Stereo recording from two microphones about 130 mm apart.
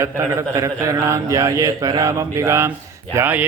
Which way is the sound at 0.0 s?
25° right (ahead or behind).